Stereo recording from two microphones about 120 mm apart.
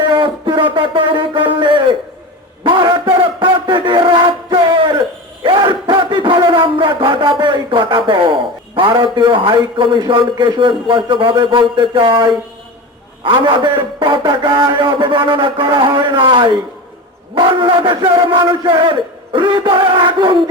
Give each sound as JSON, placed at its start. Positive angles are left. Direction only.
{"t": 0.0, "sound": "music", "side_deg": -45}
{"t": 2.6, "sound": "a sound", "side_deg": -45}
{"t": 10.1, "sound": "a man's voice", "side_deg": -40}